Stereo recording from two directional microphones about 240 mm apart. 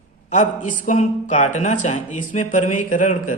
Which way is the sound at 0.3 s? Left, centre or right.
Left.